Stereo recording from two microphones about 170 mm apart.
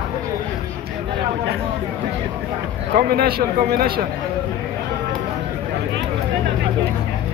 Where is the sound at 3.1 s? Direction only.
65° right (ahead or behind).